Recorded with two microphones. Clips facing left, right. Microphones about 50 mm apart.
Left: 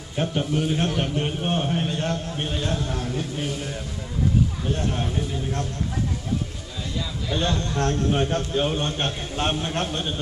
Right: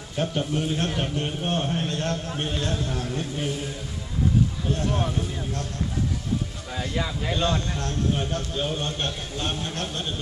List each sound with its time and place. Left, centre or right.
0.1 s a man's voice: centre
4.7 s a man's voice: centre
6.8 s speech: right
7.7 s a man's voice: left